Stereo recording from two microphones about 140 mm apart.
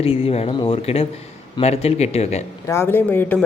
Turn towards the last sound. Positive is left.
turn(degrees=15)  # may be behind; listen again after turning